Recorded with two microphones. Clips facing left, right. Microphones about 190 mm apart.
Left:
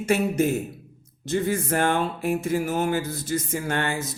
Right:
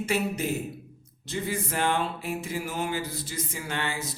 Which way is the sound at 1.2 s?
45° left (ahead or behind).